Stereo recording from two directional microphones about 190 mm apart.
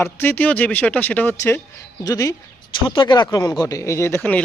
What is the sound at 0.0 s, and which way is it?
Speech, 10° left (ahead or behind).